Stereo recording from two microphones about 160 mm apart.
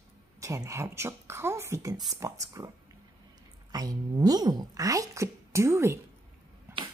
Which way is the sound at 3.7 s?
25° right (ahead or behind).